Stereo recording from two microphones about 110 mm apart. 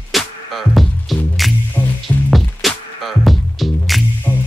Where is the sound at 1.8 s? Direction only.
20° left (ahead or behind).